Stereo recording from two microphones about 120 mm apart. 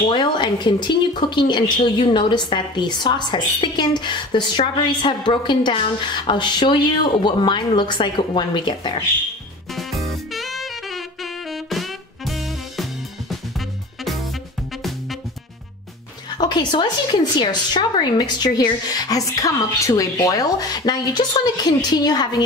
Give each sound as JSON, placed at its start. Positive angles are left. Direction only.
{"t": 0.1, "sound": "speech", "side_deg": 40}
{"t": 9.8, "sound": "saxophone", "side_deg": 0}
{"t": 14.8, "sound": "music", "side_deg": 0}
{"t": 16.3, "sound": "speech", "side_deg": 35}